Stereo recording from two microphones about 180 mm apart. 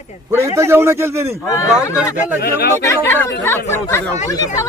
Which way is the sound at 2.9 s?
15° left (ahead or behind).